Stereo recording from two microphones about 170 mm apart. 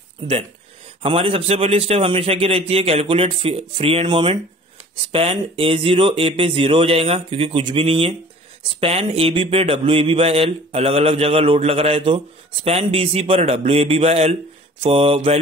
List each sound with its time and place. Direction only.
0.2 s speech: 30° right (ahead or behind)